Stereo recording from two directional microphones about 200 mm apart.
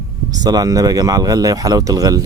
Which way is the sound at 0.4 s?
20° right (ahead or behind).